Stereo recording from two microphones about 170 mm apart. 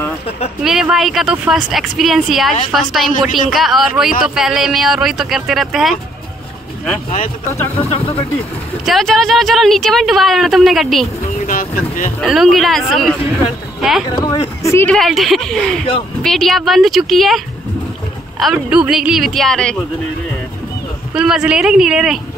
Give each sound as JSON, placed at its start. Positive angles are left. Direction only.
{"t": 0.7, "sound": "speech", "side_deg": 0}
{"t": 7.9, "sound": "speech", "side_deg": 35}
{"t": 8.8, "sound": "speech", "side_deg": 0}
{"t": 11.3, "sound": "speech", "side_deg": 50}
{"t": 12.2, "sound": "speech", "side_deg": 0}
{"t": 14.2, "sound": "speech", "side_deg": 25}
{"t": 14.9, "sound": "speech", "side_deg": 0}
{"t": 18.4, "sound": "speech", "side_deg": -5}
{"t": 21.1, "sound": "speech", "side_deg": -5}